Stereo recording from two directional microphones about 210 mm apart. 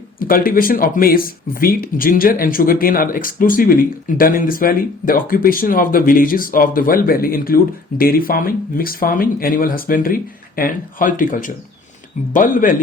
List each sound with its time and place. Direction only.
0.2 s speech: 45° left (ahead or behind)